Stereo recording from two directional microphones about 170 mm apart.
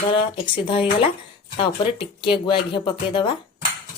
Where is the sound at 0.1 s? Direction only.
30° left (ahead or behind).